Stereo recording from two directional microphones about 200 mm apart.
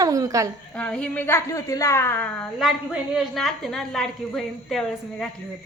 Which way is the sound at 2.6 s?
Centre (ahead or behind).